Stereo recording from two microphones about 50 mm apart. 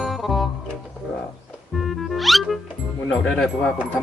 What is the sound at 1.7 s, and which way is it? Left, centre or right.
Music, centre.